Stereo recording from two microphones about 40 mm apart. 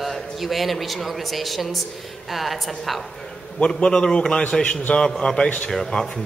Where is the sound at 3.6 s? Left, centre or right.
Left.